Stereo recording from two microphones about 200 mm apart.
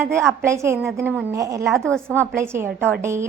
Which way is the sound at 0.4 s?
15° right (ahead or behind).